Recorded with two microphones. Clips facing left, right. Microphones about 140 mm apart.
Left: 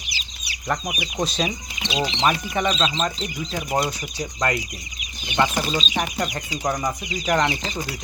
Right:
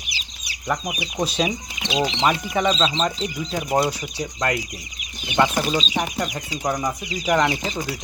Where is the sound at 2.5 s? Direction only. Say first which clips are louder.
Right 2 dB; centre (ahead or behind).